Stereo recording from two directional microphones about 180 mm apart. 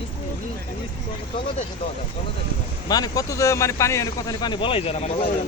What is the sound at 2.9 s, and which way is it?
A man's voice, 20° left (ahead or behind).